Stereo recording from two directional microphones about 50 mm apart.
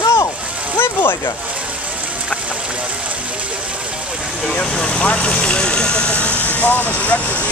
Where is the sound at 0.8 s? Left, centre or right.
Left.